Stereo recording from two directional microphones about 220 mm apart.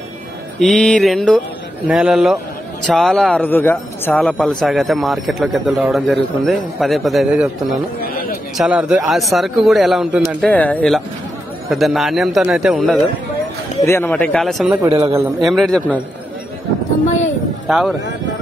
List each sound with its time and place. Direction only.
0.6 s a man's voice: 5° left (ahead or behind)
8.0 s a sound: 45° left (ahead or behind)
8.5 s a man's voice: 5° right (ahead or behind)
13.8 s a man's voice: 10° left (ahead or behind)
15.0 s a man's voice: 10° right (ahead or behind)
15.4 s a man's voice: centre (ahead or behind)
17.6 s a man's voice: centre (ahead or behind)